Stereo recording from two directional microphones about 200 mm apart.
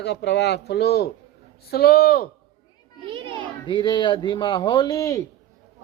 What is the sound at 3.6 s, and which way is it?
Speech, 25° left (ahead or behind).